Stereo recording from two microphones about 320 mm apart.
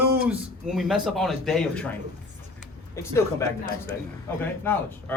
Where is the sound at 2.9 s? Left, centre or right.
Centre.